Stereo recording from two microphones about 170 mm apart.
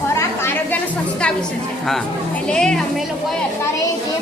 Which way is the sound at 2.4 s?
5° left (ahead or behind).